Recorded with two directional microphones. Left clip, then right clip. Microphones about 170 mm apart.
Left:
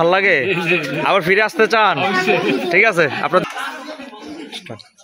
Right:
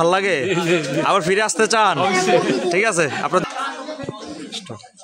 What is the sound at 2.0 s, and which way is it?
Speech, 25° right (ahead or behind).